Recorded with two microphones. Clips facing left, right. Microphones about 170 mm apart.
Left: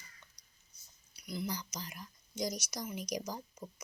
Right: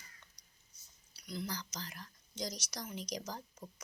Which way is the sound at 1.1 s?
10° left (ahead or behind).